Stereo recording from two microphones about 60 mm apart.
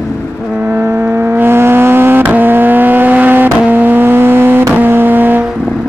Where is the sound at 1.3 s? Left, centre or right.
Right.